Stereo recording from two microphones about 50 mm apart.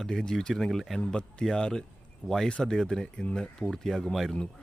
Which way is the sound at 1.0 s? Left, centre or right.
Centre.